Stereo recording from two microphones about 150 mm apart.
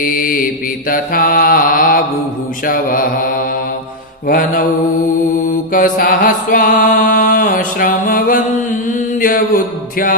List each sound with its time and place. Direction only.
0.0 s mantra: 70° left (ahead or behind)